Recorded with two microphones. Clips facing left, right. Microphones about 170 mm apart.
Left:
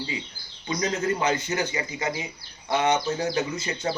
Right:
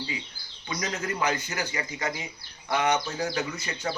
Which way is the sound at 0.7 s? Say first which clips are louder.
Left 6 dB; 30° left (ahead or behind).